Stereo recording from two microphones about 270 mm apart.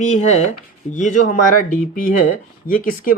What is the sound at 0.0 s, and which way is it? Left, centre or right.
Speech, left.